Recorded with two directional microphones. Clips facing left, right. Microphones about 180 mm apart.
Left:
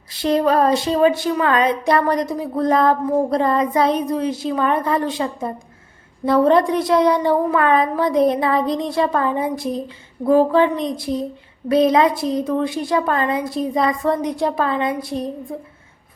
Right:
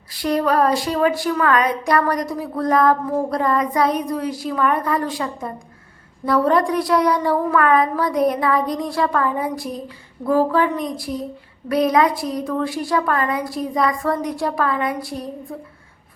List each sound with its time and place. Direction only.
0.1 s a woman's voice: 25° left (ahead or behind)